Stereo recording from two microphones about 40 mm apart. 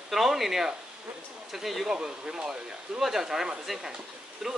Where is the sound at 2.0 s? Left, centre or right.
Centre.